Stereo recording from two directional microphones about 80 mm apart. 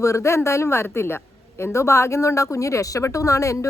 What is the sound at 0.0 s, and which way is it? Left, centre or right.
A woman's voice, left.